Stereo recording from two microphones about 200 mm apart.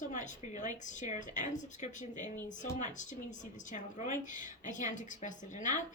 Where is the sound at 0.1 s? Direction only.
40° left (ahead or behind).